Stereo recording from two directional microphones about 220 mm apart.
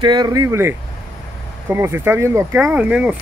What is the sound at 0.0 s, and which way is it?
Speech, 20° right (ahead or behind).